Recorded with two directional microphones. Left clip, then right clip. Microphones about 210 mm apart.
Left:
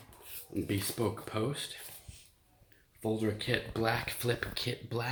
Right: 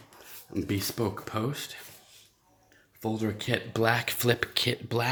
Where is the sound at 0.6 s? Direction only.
40° right (ahead or behind).